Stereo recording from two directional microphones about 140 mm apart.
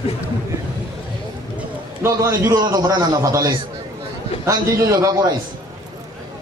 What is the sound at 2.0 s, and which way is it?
A man's voice, 20° right (ahead or behind).